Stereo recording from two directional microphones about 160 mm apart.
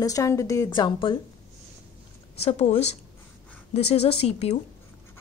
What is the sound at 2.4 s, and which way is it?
Speech, 45° left (ahead or behind).